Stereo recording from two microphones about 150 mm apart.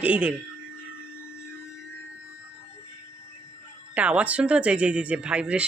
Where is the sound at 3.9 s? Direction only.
10° right (ahead or behind).